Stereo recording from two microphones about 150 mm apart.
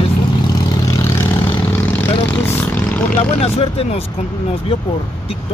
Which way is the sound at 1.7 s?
15° left (ahead or behind).